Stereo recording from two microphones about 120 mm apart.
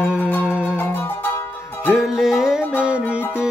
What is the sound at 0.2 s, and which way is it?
Music, 15° left (ahead or behind).